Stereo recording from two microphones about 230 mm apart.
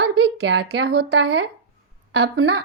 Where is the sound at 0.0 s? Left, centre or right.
Right.